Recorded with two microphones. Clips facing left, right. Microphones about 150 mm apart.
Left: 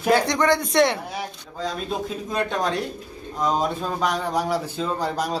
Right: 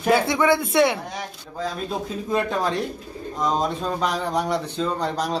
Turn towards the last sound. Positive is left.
turn(degrees=5)  # may be behind; listen again after turning